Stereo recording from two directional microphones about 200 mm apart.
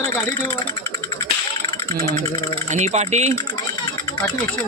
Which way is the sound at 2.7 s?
35° right (ahead or behind).